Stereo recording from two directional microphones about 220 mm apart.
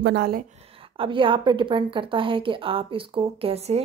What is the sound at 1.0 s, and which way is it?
A woman's voice, 25° right (ahead or behind).